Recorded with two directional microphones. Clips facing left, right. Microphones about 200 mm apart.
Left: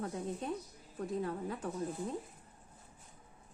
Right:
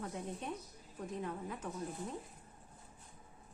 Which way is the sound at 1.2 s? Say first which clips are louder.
Left 4 dB; 35° left (ahead or behind).